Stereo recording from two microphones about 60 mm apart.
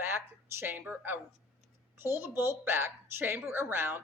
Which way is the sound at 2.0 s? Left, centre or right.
Right.